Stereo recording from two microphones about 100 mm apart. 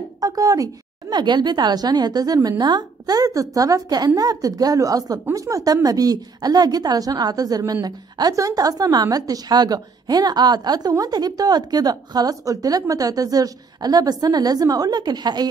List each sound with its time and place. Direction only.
0.2 s a woman's voice: 35° right (ahead or behind)
1.1 s a woman's voice: 50° right (ahead or behind)